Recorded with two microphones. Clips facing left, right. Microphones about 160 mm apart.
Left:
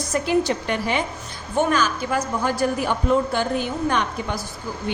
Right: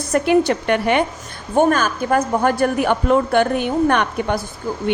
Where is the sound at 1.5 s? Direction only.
50° right (ahead or behind).